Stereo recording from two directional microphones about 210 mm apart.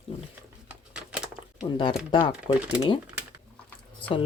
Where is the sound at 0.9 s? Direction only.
5° right (ahead or behind).